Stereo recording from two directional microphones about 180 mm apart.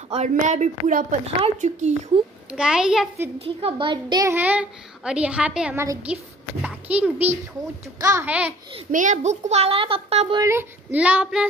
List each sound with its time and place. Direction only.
0.1 s a woman's voice: 40° right (ahead or behind)
2.5 s a child's voice: 5° right (ahead or behind)
3.3 s a child's voice: 30° right (ahead or behind); by 8.5 s 10° right (ahead or behind)
8.9 s a woman's voice: 45° right (ahead or behind)
10.4 s a child's voice: 15° right (ahead or behind)